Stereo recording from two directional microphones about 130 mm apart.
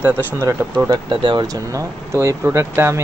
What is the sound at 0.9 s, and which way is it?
Speech, 35° right (ahead or behind).